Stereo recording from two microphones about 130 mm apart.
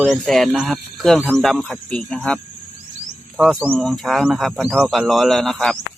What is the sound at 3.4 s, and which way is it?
Speech, 10° right (ahead or behind).